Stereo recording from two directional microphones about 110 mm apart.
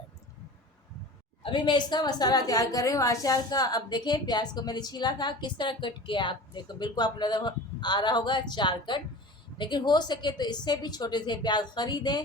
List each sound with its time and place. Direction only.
1.4 s a woman's voice: 50° left (ahead or behind)